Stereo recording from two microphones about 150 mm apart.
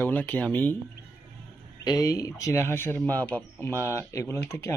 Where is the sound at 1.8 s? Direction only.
25° left (ahead or behind).